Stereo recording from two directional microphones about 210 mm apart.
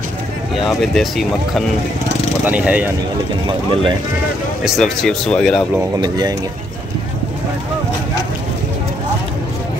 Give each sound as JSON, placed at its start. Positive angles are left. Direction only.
{"t": 0.7, "sound": "speech", "side_deg": 0}
{"t": 3.4, "sound": "speech", "side_deg": -25}
{"t": 4.6, "sound": "speech", "side_deg": 0}
{"t": 5.8, "sound": "speech", "side_deg": -20}